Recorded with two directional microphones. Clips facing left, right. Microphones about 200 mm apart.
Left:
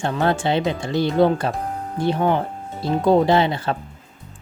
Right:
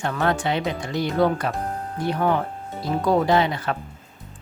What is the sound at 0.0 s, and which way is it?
Speech, 30° left (ahead or behind).